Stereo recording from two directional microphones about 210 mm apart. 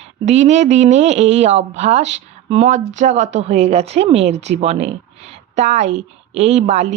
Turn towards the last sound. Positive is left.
turn(degrees=-35)  # may be behind; listen again after turning